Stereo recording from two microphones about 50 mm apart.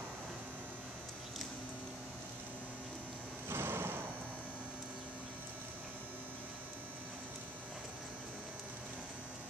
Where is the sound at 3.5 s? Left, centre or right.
Right.